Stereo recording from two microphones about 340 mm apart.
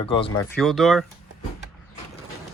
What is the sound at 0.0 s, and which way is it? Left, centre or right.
Speech, centre.